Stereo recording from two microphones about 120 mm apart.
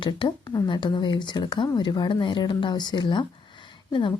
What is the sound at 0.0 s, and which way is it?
Speech, 40° left (ahead or behind).